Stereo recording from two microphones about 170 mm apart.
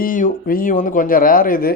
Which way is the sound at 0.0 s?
50° left (ahead or behind).